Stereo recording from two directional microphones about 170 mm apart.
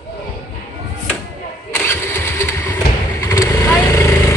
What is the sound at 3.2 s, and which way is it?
Vehicle, 20° left (ahead or behind).